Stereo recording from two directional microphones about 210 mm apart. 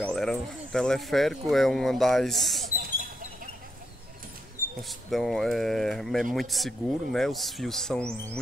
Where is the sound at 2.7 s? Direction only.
40° right (ahead or behind).